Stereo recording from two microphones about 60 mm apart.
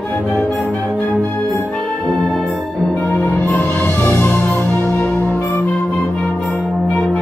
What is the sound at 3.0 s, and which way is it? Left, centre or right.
Music, left.